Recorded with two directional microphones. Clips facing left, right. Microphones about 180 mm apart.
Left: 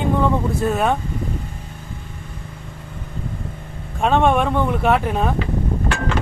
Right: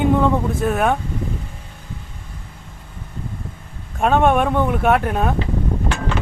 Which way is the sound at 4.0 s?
5° right (ahead or behind).